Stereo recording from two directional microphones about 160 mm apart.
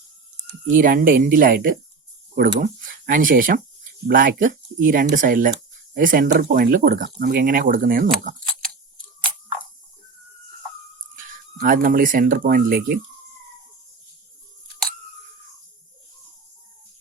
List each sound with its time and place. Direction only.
0.7 s speech: 60° right (ahead or behind)
2.3 s speech: 85° right
2.6 s speech: 55° right (ahead or behind)
11.6 s speech: 60° right (ahead or behind)